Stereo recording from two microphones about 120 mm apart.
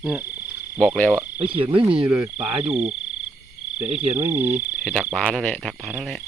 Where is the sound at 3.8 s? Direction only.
60° right (ahead or behind).